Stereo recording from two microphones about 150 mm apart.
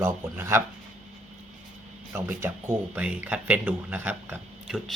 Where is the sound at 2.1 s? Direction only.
15° right (ahead or behind).